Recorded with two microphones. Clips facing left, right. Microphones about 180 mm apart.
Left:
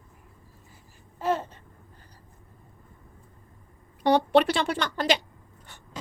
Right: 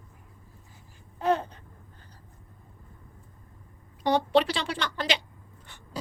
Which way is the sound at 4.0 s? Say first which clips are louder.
Left 3 dB; 60° left (ahead or behind).